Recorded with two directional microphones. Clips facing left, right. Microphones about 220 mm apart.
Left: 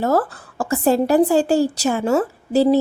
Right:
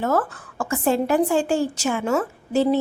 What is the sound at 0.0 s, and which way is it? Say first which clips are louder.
A woman's voice: left 3 dB; 35° left (ahead or behind).